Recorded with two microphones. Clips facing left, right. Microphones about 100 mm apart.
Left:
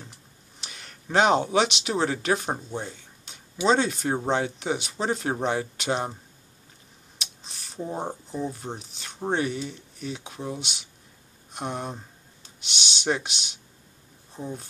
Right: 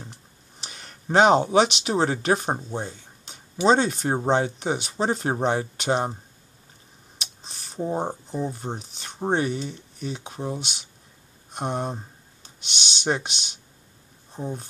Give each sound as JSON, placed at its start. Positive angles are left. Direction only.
{"t": 0.6, "sound": "speech", "side_deg": -40}
{"t": 7.2, "sound": "speech", "side_deg": -35}
{"t": 12.7, "sound": "speech", "side_deg": 5}
{"t": 13.0, "sound": "speech", "side_deg": -35}
{"t": 14.3, "sound": "speech", "side_deg": -30}